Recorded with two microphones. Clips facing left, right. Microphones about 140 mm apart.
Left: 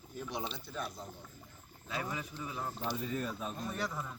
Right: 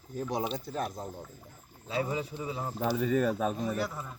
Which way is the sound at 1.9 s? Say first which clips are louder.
Right 7 dB; 25° right (ahead or behind).